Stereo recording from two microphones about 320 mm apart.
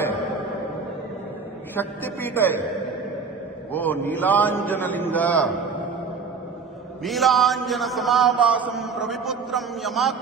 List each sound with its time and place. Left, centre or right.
1.8 s a woman's voice: centre
3.7 s a man's voice: centre
7.1 s a man's voice: centre